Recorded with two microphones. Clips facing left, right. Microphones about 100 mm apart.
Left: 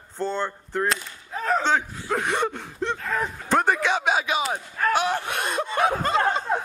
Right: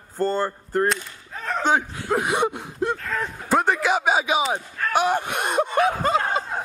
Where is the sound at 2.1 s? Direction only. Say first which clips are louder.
Right 3 dB; 10° right (ahead or behind).